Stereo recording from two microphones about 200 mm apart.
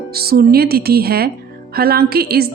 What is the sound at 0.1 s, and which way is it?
Speech, 50° right (ahead or behind).